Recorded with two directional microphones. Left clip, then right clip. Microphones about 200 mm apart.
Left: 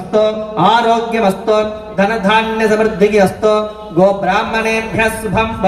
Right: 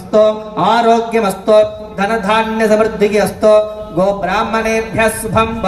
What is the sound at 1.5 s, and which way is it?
A man's voice, 40° right (ahead or behind).